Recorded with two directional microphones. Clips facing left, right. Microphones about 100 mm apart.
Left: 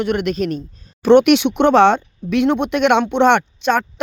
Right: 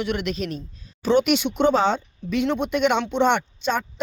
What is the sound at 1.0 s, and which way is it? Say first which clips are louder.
Speech: left 8 dB; 65° left (ahead or behind).